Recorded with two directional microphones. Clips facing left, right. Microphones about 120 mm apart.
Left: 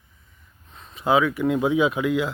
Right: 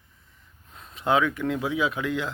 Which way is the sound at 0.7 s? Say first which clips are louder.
Left 3 dB; centre (ahead or behind).